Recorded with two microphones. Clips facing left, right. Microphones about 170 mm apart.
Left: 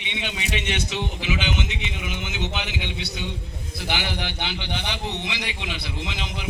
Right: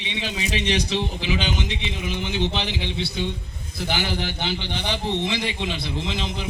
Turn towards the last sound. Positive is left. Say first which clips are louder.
# right 4 dB
turn(degrees=-30)  # may be behind; listen again after turning